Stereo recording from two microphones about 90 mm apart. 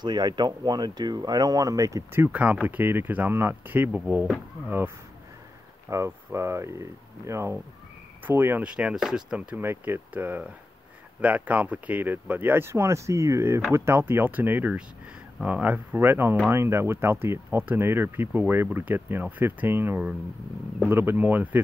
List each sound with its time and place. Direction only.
0.0 s speech: 50° right (ahead or behind)
2.1 s speech: 20° right (ahead or behind)
5.9 s speech: 35° right (ahead or behind)
8.6 s speech: 10° right (ahead or behind)
9.6 s speech: 25° right (ahead or behind)